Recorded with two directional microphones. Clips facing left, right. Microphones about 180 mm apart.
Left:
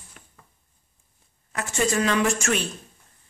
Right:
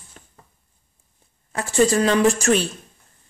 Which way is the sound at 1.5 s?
35° right (ahead or behind).